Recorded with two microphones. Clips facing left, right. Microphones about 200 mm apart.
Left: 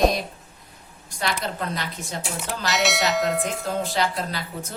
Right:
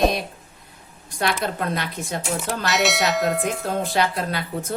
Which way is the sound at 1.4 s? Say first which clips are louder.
Right 4 dB; 55° right (ahead or behind).